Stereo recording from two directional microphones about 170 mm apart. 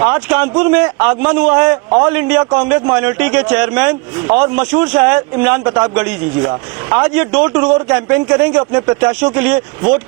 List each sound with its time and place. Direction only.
0.0 s speech: 10° right (ahead or behind)
6.4 s speech: 15° right (ahead or behind)
8.5 s speech: 20° right (ahead or behind)
9.0 s speech: 10° right (ahead or behind)